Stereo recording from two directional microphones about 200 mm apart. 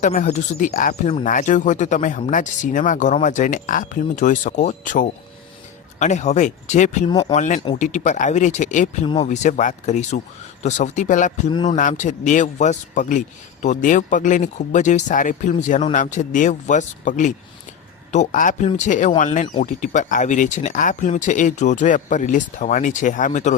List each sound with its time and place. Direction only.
0.0 s a man's voice: 40° left (ahead or behind)
7.1 s speech: 20° left (ahead or behind)
7.3 s a man's voice: 40° left (ahead or behind)